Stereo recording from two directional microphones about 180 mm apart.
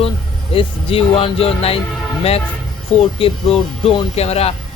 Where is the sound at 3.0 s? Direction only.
30° left (ahead or behind).